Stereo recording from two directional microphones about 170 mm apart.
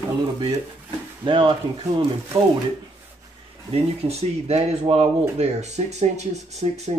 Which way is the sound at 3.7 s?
40° right (ahead or behind).